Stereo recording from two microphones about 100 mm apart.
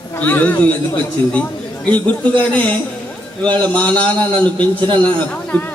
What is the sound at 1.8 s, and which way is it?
A man's voice, 15° left (ahead or behind).